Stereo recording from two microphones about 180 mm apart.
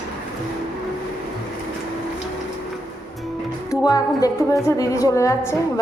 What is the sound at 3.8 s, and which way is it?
Speech, 20° left (ahead or behind).